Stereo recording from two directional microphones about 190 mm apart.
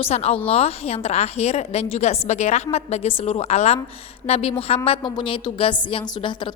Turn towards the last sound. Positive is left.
turn(degrees=25)  # may be behind; listen again after turning